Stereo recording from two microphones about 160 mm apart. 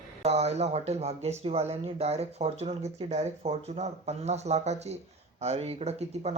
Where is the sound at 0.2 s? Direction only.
40° right (ahead or behind).